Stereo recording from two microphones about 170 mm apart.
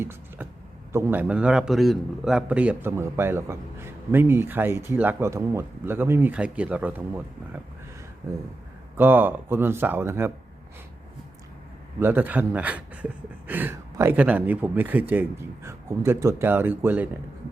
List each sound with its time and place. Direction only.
0.0 s a sound: 15° right (ahead or behind)
0.9 s a man's voice: 10° right (ahead or behind)
11.9 s a man's voice: 10° right (ahead or behind)